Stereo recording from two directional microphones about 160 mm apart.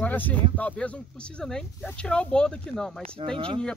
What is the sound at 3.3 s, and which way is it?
Speech, 30° right (ahead or behind).